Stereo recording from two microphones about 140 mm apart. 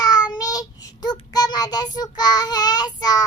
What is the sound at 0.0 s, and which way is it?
Child singing, 30° left (ahead or behind).